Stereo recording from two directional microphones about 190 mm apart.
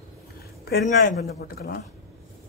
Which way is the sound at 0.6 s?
55° left (ahead or behind).